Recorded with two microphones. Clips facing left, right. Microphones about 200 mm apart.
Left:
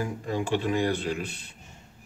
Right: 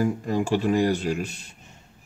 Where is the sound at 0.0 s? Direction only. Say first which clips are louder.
Right 6 dB; 40° right (ahead or behind).